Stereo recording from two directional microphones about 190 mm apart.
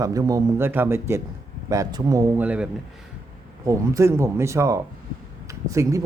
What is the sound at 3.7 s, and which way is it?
Speech, 15° right (ahead or behind).